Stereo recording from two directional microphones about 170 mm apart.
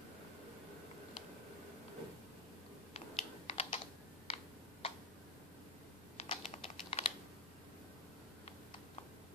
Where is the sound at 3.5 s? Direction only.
40° left (ahead or behind).